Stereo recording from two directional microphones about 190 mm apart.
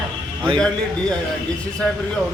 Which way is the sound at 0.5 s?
5° left (ahead or behind).